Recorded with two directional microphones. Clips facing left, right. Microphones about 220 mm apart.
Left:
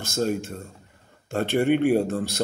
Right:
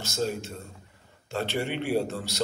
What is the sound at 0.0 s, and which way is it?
A man's voice, 50° left (ahead or behind).